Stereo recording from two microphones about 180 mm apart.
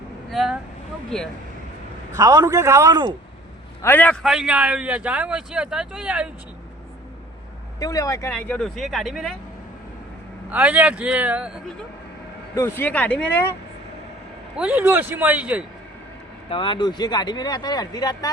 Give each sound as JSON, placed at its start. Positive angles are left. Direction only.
{"t": 0.3, "sound": "speech", "side_deg": 0}
{"t": 2.1, "sound": "a man's voice", "side_deg": -20}
{"t": 3.8, "sound": "speech", "side_deg": 10}
{"t": 4.2, "sound": "speech", "side_deg": -5}
{"t": 7.8, "sound": "speech", "side_deg": 20}
{"t": 8.3, "sound": "speech", "side_deg": 5}
{"t": 10.5, "sound": "speech", "side_deg": -10}
{"t": 12.5, "sound": "speech", "side_deg": 15}
{"t": 14.5, "sound": "speech", "side_deg": -5}
{"t": 16.5, "sound": "speech", "side_deg": 30}